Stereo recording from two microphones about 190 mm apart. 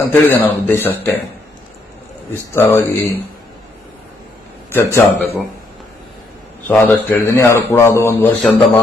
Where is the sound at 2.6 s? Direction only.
10° left (ahead or behind).